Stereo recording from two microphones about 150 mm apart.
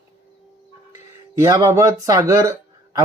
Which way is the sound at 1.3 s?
20° right (ahead or behind).